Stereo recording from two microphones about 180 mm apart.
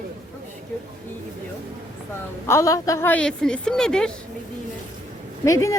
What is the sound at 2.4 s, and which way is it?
A woman's voice, 15° left (ahead or behind).